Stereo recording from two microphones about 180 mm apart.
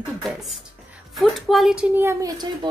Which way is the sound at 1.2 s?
Centre (ahead or behind).